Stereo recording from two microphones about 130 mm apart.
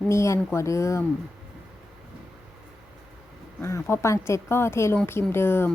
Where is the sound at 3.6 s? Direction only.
20° left (ahead or behind).